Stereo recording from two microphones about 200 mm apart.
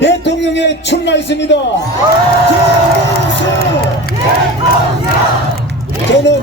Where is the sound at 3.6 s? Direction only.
50° left (ahead or behind).